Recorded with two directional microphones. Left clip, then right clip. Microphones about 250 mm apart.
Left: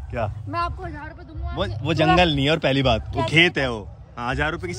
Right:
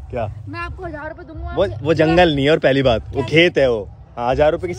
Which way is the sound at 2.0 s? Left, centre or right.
Right.